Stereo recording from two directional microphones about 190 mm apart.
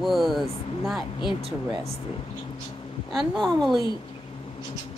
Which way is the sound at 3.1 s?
Centre (ahead or behind).